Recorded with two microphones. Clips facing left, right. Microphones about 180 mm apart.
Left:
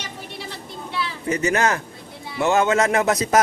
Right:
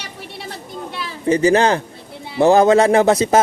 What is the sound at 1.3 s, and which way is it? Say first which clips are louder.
A man's voice: right 7 dB; 30° right (ahead or behind).